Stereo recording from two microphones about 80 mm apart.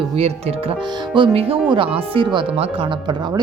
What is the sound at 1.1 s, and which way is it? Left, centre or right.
Speech, right.